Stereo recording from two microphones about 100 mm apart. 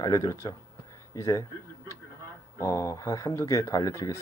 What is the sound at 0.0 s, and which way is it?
Speech, 35° left (ahead or behind).